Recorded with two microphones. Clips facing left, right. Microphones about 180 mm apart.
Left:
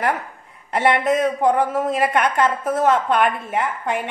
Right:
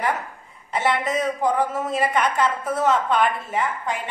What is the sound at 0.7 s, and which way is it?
A woman's voice, 60° left (ahead or behind).